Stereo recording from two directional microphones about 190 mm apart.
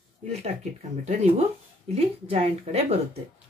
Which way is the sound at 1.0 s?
35° right (ahead or behind).